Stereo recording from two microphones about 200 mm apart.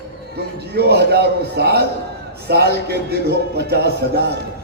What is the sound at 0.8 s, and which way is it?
A man's voice, 55° right (ahead or behind).